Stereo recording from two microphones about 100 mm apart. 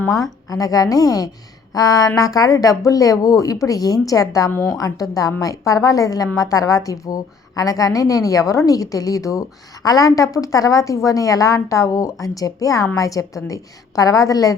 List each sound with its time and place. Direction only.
0.2 s a woman's voice: 35° left (ahead or behind)